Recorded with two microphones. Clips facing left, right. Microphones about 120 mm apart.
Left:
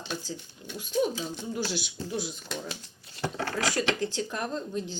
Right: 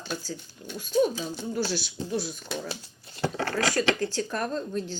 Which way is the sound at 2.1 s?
15° left (ahead or behind).